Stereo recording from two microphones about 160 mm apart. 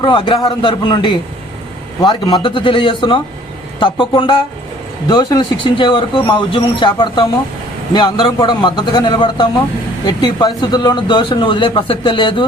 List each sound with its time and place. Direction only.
0.0 s speech: 30° left (ahead or behind)